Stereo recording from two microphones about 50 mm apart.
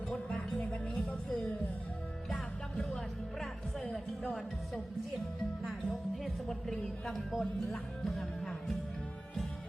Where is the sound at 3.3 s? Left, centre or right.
Centre.